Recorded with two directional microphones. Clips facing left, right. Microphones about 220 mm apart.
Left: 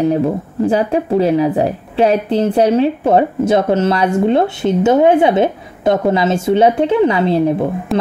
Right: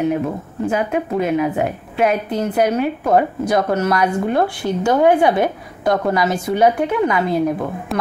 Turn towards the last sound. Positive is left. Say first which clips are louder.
# left 4 dB
turn(degrees=30)  # may be behind; listen again after turning